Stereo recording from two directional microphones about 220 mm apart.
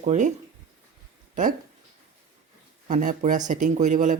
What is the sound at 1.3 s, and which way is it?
Speech, 35° right (ahead or behind).